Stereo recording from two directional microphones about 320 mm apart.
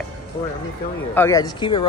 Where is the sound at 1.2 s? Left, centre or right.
Centre.